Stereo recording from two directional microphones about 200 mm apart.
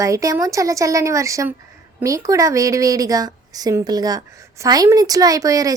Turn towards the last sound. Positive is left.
turn(degrees=-15)  # may be behind; listen again after turning